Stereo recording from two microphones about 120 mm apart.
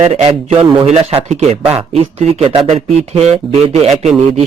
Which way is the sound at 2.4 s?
55° right (ahead or behind).